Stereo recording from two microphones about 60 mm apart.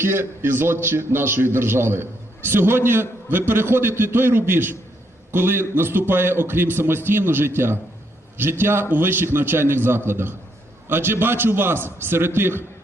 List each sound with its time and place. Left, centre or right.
0.0 s a man's voice: right